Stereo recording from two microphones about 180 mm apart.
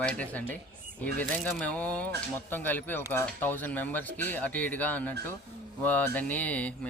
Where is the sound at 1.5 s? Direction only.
10° left (ahead or behind).